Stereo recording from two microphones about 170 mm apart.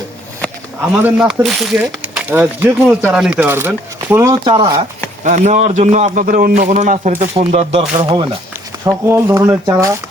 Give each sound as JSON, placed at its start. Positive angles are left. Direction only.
{"t": 1.0, "sound": "speech", "side_deg": -5}
{"t": 5.2, "sound": "a man's voice", "side_deg": -45}
{"t": 6.6, "sound": "a man's voice", "side_deg": -45}
{"t": 7.3, "sound": "speech", "side_deg": -35}
{"t": 8.9, "sound": "speech", "side_deg": -15}